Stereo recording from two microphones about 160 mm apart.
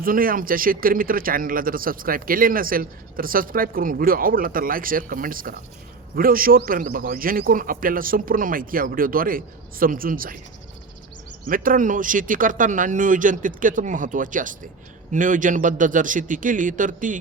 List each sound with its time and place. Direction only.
0.0 s speech: 65° right (ahead or behind)
11.4 s speech: 60° right (ahead or behind)